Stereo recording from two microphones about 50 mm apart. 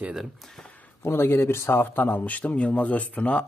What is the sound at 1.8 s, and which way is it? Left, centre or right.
Speech, left.